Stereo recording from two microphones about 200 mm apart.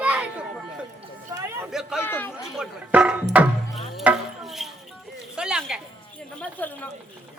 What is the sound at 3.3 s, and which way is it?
Music, 5° right (ahead or behind).